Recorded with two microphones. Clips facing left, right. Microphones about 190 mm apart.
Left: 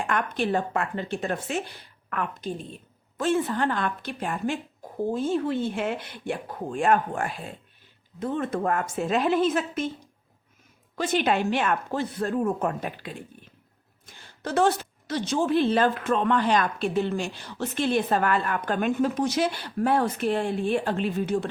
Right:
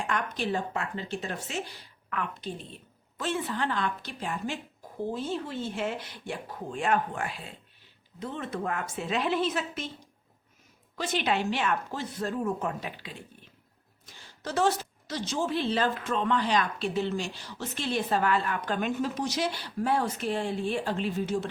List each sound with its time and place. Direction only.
0.1 s a woman's voice: 55° left (ahead or behind)
10.9 s speech: 50° left (ahead or behind)
14.1 s a woman's voice: 55° left (ahead or behind)